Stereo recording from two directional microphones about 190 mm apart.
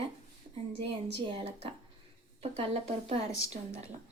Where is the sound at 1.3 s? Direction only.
30° right (ahead or behind).